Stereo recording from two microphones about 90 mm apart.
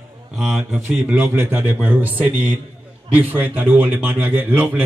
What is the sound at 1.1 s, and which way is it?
A man's voice, 25° right (ahead or behind).